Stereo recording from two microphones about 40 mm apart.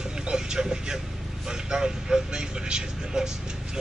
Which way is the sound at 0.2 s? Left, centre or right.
Centre.